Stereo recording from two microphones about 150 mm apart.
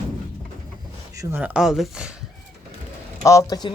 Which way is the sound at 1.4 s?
10° right (ahead or behind).